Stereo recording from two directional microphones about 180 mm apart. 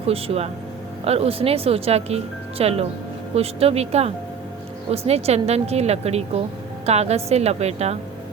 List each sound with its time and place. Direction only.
0.0 s speech: 35° right (ahead or behind)